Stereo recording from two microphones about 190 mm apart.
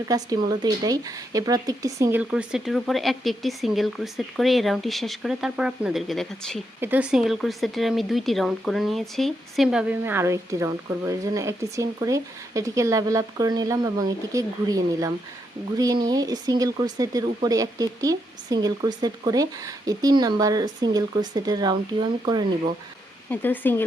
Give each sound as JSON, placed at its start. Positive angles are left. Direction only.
{"t": 0.1, "sound": "speech", "side_deg": -20}
{"t": 6.7, "sound": "speech", "side_deg": -10}
{"t": 23.3, "sound": "speech", "side_deg": 10}